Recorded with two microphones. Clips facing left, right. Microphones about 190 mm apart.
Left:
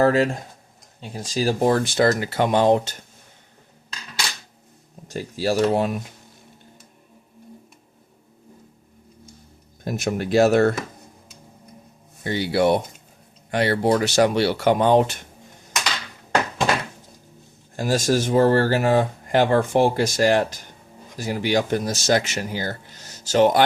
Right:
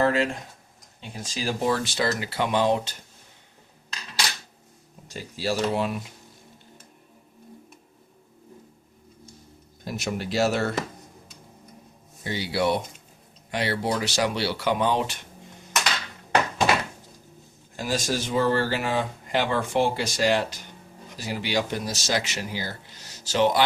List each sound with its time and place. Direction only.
0.0 s speech: 40° left (ahead or behind)
5.0 s speech: 45° left (ahead or behind)
9.8 s speech: 50° left (ahead or behind)
12.2 s speech: 55° left (ahead or behind)
17.7 s speech: 45° left (ahead or behind)